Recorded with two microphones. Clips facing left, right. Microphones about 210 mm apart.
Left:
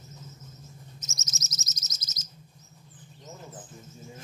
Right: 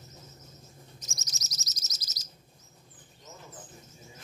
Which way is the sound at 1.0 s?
20° left (ahead or behind).